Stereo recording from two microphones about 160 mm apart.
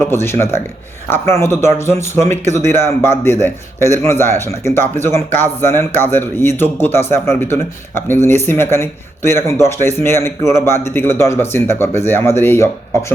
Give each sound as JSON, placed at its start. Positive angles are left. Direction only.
{"t": 0.1, "sound": "speech", "side_deg": 15}